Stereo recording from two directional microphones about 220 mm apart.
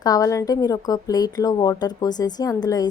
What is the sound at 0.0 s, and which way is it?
A woman's voice, 15° left (ahead or behind).